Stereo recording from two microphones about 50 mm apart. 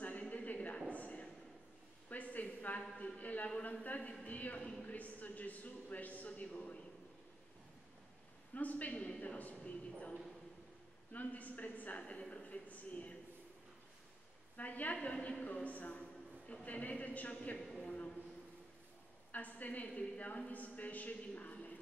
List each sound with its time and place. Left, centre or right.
0.3 s a sound: left
3.8 s a woman's voice: left
8.5 s a woman's voice: left
11.1 s a woman's voice: left
14.6 s a woman's voice: left
17.6 s a man's voice: centre
19.3 s a woman's voice: left